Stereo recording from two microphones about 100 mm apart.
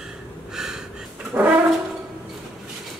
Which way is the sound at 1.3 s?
15° right (ahead or behind).